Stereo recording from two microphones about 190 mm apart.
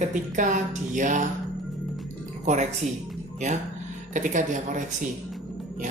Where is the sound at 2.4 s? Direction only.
40° right (ahead or behind).